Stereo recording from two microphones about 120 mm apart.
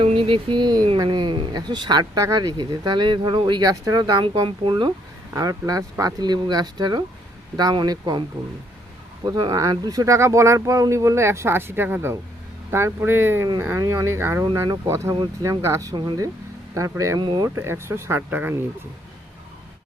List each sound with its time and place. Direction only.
0.0 s a sound: 50° right (ahead or behind)
0.9 s speech: 35° right (ahead or behind)
5.3 s speech: 30° right (ahead or behind)
9.2 s speech: 30° right (ahead or behind)
15.1 s speech: 35° right (ahead or behind)
15.4 s speech: 25° right (ahead or behind)